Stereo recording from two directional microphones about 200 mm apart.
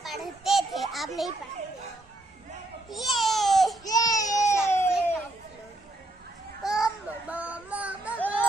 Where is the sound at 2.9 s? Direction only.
Centre (ahead or behind).